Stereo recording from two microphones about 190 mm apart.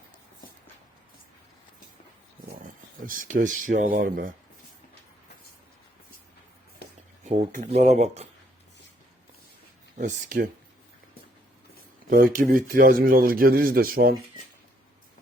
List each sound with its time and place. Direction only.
3.1 s speech: 45° right (ahead or behind)
7.3 s speech: 35° right (ahead or behind)
10.0 s speech: 45° right (ahead or behind)
12.0 s speech: 45° right (ahead or behind)